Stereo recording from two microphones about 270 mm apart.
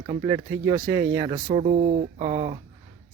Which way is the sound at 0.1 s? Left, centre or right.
Centre.